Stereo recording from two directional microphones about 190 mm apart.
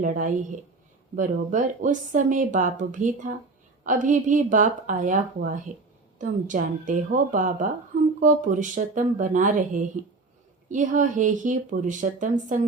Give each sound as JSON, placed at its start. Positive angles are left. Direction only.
{"t": 0.0, "sound": "speech", "side_deg": -45}